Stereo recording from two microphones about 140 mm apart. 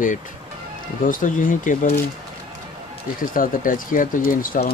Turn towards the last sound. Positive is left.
turn(degrees=80)